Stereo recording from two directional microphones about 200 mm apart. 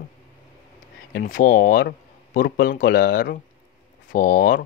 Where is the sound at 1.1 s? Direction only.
40° left (ahead or behind).